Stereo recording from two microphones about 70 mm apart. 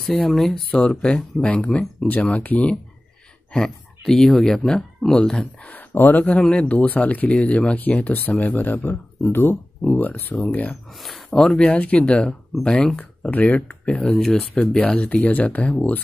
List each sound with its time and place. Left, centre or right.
0.0 s speech: centre
0.7 s speech: centre
3.5 s speech: centre
5.7 s speech: left
11.0 s speech: centre
11.3 s speech: centre
14.1 s speech: centre